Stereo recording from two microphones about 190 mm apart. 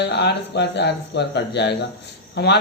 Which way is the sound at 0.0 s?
65° left (ahead or behind).